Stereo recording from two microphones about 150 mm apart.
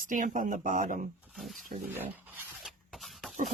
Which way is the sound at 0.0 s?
60° right (ahead or behind).